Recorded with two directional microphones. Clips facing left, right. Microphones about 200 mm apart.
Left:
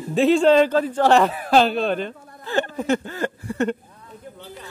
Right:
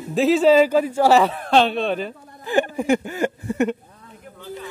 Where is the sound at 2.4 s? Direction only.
15° right (ahead or behind).